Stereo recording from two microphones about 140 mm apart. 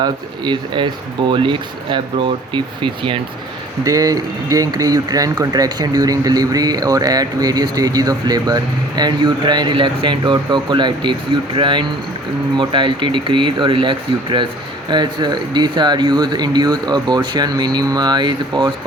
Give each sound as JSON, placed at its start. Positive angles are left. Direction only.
{"t": 0.0, "sound": "speech", "side_deg": -35}